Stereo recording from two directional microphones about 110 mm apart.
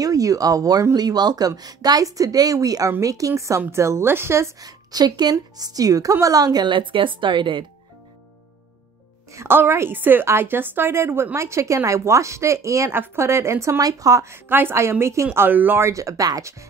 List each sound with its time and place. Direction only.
0.0 s a woman's voice: 30° right (ahead or behind); by 7.6 s 50° right (ahead or behind)
9.3 s a woman's voice: 25° right (ahead or behind)